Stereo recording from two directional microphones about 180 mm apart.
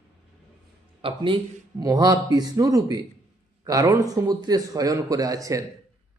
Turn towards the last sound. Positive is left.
turn(degrees=-20)  # may be behind; listen again after turning